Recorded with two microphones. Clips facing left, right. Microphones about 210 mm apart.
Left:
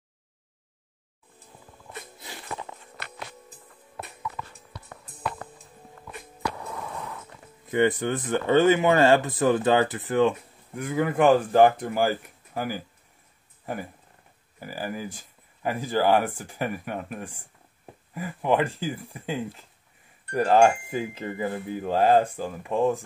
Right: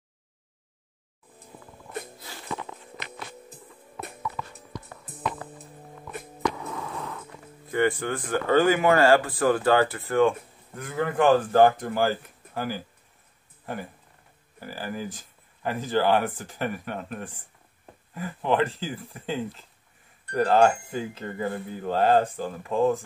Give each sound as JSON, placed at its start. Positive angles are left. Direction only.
{"t": 6.4, "sound": "a sound", "side_deg": 5}
{"t": 7.7, "sound": "speech", "side_deg": 20}
{"t": 14.6, "sound": "speech", "side_deg": 15}